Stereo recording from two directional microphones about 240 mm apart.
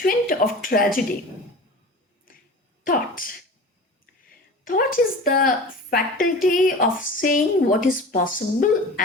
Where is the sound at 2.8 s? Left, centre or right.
Left.